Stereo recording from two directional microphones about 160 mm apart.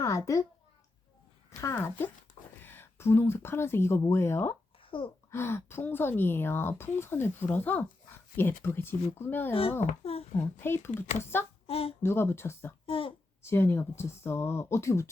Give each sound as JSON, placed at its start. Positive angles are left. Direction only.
{"t": 0.0, "sound": "a sound", "side_deg": 20}
{"t": 1.5, "sound": "a woman's voice", "side_deg": 15}
{"t": 4.8, "sound": "a sound", "side_deg": 30}
{"t": 5.3, "sound": "a woman's voice", "side_deg": 15}
{"t": 9.5, "sound": "a child's voice", "side_deg": 35}
{"t": 10.3, "sound": "a woman's voice", "side_deg": 15}
{"t": 11.6, "sound": "speech", "side_deg": 35}
{"t": 12.0, "sound": "a woman's voice", "side_deg": 15}
{"t": 12.8, "sound": "a child's voice", "side_deg": 35}
{"t": 13.4, "sound": "a woman's voice", "side_deg": 15}